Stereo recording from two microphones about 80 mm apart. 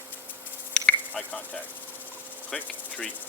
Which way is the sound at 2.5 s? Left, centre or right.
Centre.